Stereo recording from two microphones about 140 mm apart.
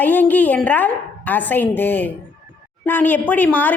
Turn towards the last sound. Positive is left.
turn(degrees=10)  # may be behind; listen again after turning